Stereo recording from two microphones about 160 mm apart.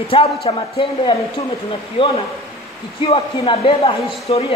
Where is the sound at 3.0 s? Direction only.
35° left (ahead or behind).